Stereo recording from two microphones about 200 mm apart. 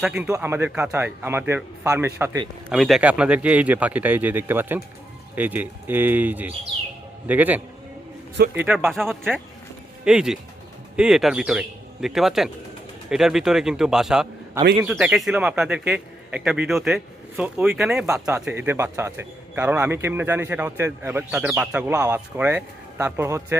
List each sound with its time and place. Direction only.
0.2 s speech: 10° right (ahead or behind)
2.6 s speech: centre (ahead or behind)
18.0 s speech: 15° right (ahead or behind)